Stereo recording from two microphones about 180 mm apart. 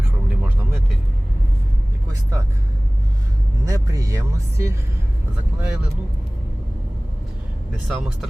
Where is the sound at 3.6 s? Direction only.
20° right (ahead or behind).